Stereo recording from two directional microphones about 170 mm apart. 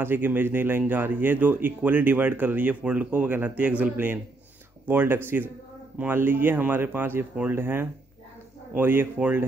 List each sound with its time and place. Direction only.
0.0 s speech: 10° right (ahead or behind)